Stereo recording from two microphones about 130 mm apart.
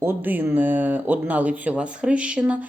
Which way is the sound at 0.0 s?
15° right (ahead or behind).